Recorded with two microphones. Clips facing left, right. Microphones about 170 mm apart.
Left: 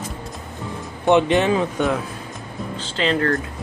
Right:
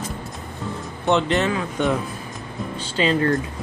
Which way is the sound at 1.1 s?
15° left (ahead or behind).